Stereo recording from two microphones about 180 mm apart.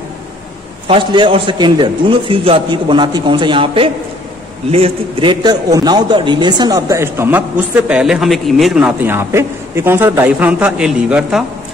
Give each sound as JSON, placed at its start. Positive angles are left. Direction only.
{"t": 0.8, "sound": "a man's voice", "side_deg": -30}